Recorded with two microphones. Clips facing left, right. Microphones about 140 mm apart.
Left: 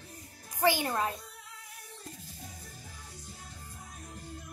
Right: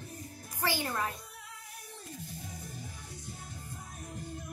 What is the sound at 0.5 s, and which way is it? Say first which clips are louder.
Speech: left 5 dB; 15° left (ahead or behind).